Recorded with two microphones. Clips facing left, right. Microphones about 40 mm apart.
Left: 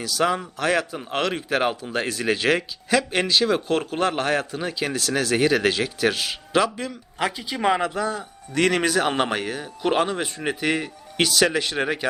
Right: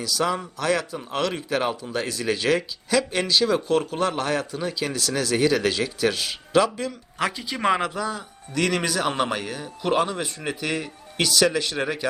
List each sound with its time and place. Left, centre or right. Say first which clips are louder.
0.0 s speech: left 2 dB; left
3.7 s speech: even; left
6.2 s speech: right 1 dB; centre
7.5 s speech: left 1 dB; centre
7.9 s speech: left 2 dB; left